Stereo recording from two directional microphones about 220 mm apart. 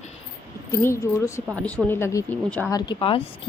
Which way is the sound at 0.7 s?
10° left (ahead or behind).